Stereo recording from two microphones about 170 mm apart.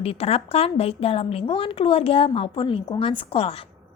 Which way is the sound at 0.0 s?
35° left (ahead or behind).